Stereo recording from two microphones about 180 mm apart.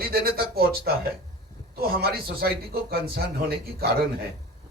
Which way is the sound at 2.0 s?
55° right (ahead or behind).